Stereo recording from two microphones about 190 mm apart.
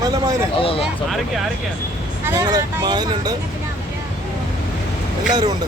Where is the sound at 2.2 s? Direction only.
10° right (ahead or behind).